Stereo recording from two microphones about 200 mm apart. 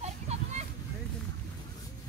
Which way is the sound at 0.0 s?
35° right (ahead or behind).